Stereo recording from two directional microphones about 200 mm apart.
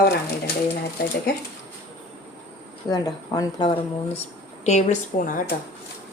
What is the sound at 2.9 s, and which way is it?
Speech, 20° left (ahead or behind).